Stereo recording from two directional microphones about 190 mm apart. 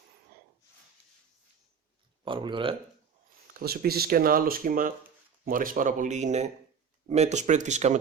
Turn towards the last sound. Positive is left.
turn(degrees=-40)  # may be behind; listen again after turning